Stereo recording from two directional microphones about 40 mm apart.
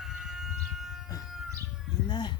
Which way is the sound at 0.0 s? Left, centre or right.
Centre.